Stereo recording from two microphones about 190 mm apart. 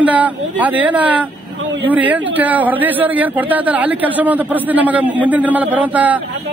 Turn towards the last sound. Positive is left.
turn(degrees=-10)  # may be behind; listen again after turning